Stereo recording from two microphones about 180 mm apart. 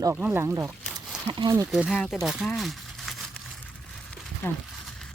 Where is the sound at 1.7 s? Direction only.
Centre (ahead or behind).